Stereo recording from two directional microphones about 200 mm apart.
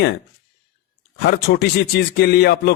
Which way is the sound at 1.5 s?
55° left (ahead or behind).